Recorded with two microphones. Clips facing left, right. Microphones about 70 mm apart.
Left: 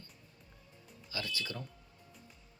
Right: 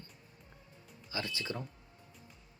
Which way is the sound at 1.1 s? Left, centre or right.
Right.